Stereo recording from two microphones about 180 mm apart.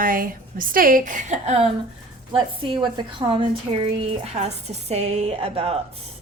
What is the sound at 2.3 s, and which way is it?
A woman's voice, 30° right (ahead or behind).